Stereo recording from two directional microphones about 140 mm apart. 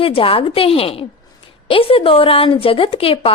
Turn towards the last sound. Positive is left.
turn(degrees=40)  # may be behind; listen again after turning